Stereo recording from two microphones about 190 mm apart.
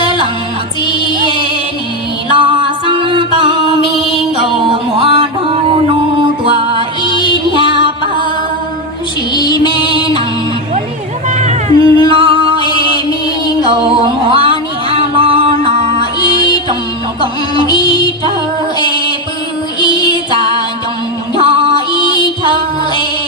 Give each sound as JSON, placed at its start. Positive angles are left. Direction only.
{"t": 0.9, "sound": "music", "side_deg": 25}
{"t": 1.2, "sound": "music", "side_deg": -25}
{"t": 9.3, "sound": "music", "side_deg": 25}
{"t": 11.3, "sound": "music", "side_deg": -40}
{"t": 14.3, "sound": "music", "side_deg": -30}
{"t": 16.2, "sound": "music", "side_deg": 25}
{"t": 17.7, "sound": "music", "side_deg": 25}
{"t": 19.8, "sound": "music", "side_deg": 25}
{"t": 21.3, "sound": "music", "side_deg": -30}